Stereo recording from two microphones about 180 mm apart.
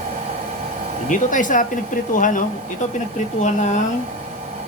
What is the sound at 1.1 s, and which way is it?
Speech, 45° left (ahead or behind).